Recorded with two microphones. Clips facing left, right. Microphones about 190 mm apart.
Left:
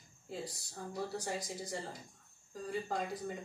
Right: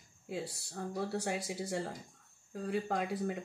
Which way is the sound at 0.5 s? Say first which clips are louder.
Right 4 dB; 70° right (ahead or behind).